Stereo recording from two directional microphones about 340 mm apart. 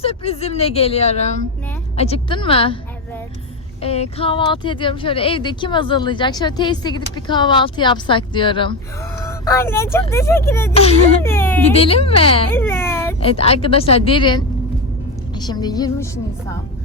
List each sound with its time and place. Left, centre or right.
0.0 s speech: centre
3.8 s speech: centre